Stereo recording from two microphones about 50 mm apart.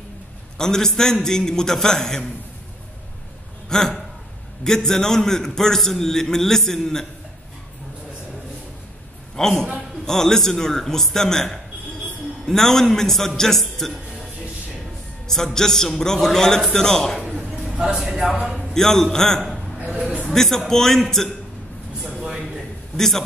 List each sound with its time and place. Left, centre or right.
0.6 s a man's voice: centre
3.6 s a man's voice: centre
9.4 s a man's voice: centre
15.2 s a man's voice: centre
17.4 s a sound: centre
18.2 s a man's voice: right
18.7 s a man's voice: centre
22.2 s a sound: centre
22.9 s a man's voice: centre